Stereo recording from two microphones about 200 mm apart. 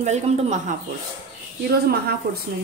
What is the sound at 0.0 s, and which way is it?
Speech, 35° right (ahead or behind).